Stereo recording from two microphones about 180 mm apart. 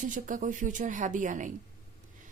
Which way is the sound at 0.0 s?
45° right (ahead or behind).